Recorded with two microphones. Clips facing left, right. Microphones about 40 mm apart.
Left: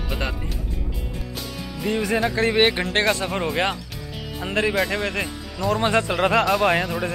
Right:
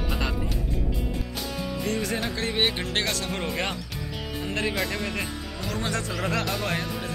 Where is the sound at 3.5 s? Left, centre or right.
Left.